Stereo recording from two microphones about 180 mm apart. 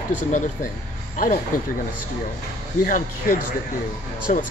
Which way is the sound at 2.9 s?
50° left (ahead or behind).